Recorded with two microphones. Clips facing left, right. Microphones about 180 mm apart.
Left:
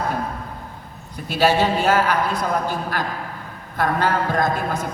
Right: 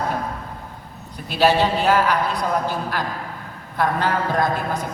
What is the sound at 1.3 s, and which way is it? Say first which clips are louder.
A man's voice: even; 45° left (ahead or behind).